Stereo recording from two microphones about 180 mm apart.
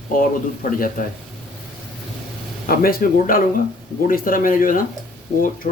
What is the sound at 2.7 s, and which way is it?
Speech, 55° left (ahead or behind).